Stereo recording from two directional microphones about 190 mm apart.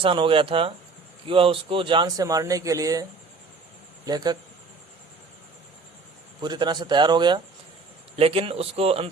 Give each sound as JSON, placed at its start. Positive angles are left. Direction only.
{"t": 0.0, "sound": "speech", "side_deg": -25}
{"t": 6.4, "sound": "speech", "side_deg": -25}